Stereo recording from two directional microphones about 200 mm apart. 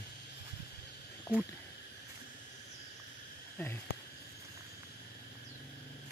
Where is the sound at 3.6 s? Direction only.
10° left (ahead or behind).